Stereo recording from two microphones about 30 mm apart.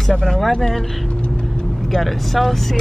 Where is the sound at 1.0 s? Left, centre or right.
Left.